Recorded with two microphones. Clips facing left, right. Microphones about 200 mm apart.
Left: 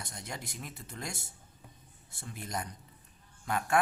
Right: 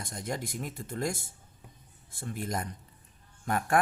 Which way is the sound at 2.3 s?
55° right (ahead or behind).